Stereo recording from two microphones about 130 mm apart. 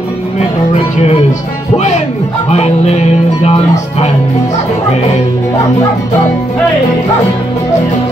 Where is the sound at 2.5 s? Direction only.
60° left (ahead or behind).